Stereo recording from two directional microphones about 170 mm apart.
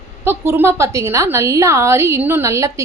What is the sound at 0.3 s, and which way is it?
A woman's voice, 15° right (ahead or behind).